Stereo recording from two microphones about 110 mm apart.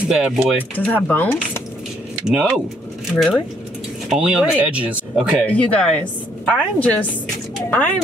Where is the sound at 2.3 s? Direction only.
10° right (ahead or behind).